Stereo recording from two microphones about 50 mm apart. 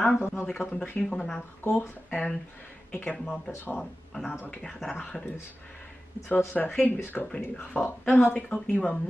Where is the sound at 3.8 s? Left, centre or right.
Centre.